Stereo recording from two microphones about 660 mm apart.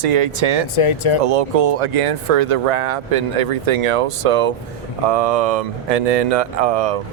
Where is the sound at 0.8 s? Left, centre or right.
Left.